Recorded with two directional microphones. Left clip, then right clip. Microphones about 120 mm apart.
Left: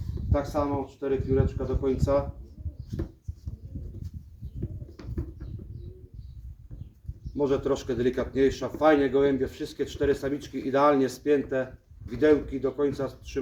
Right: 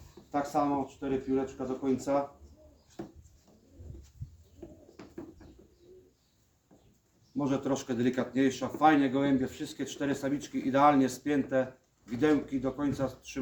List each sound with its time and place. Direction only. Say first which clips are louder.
0.3 s speech: left 2 dB; 20° right (ahead or behind)
5.0 s a sound: left 4 dB; 20° left (ahead or behind)
7.3 s speech: left 6 dB; 20° right (ahead or behind)